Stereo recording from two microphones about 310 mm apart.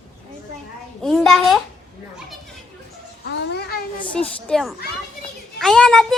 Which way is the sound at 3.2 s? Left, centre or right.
Left.